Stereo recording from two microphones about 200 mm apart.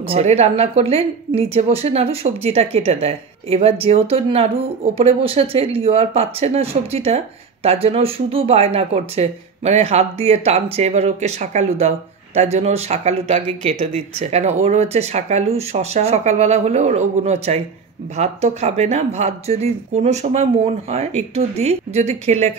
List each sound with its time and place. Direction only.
0.1 s a woman's voice: 30° right (ahead or behind)